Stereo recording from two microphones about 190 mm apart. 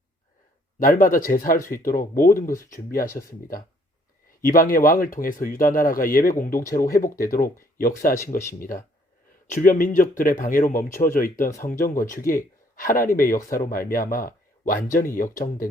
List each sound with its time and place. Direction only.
0.8 s speech: 45° left (ahead or behind)
4.4 s speech: 50° left (ahead or behind)
9.5 s speech: 40° left (ahead or behind)
11.4 s speech: 15° left (ahead or behind)
11.7 s speech: 45° left (ahead or behind)